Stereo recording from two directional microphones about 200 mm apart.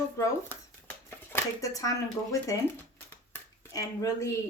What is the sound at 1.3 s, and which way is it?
Speech, 15° left (ahead or behind).